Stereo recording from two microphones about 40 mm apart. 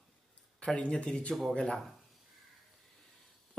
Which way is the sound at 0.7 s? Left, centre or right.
Left.